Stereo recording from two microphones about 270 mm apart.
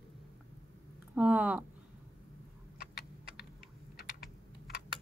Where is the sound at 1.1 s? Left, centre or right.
Centre.